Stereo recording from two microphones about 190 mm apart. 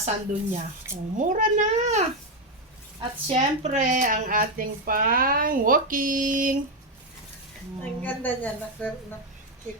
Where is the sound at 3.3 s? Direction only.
35° right (ahead or behind).